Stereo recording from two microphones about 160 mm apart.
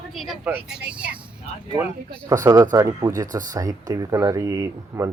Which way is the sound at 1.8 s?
20° right (ahead or behind).